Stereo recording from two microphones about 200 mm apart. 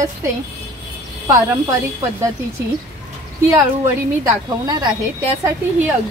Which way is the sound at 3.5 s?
15° right (ahead or behind).